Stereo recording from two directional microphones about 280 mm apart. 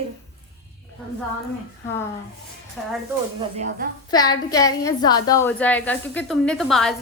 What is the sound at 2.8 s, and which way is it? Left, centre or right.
Speech, centre.